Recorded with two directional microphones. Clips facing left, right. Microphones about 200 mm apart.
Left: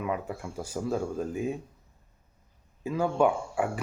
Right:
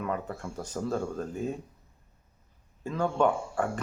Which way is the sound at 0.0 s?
10° left (ahead or behind).